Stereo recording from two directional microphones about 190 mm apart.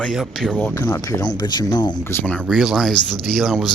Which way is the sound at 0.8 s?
15° left (ahead or behind).